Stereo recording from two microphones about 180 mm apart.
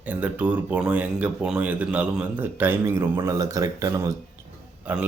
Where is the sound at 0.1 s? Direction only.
10° right (ahead or behind).